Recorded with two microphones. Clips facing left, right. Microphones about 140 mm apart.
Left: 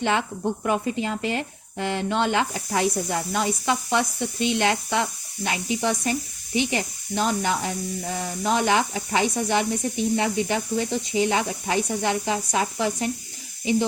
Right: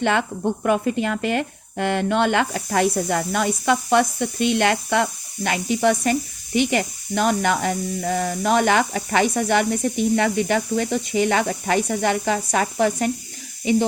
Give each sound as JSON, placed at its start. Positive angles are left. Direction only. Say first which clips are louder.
{"t": 0.0, "sound": "speech", "louder": "right 3 dB", "side_deg": -55}